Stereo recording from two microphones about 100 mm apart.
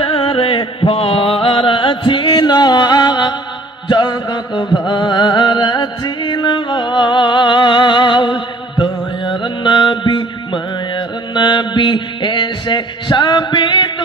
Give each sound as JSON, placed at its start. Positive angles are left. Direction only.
{"t": 0.0, "sound": "music", "side_deg": 60}